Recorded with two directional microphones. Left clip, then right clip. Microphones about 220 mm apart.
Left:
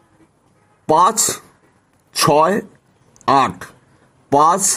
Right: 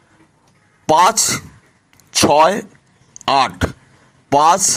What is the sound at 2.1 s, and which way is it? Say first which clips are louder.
Speech: right 2 dB; 15° right (ahead or behind).